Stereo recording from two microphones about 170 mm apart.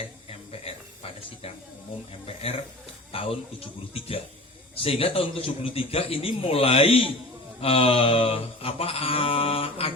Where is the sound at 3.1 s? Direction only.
35° left (ahead or behind).